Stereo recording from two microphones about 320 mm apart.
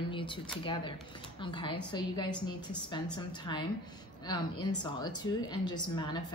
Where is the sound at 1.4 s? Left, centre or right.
Centre.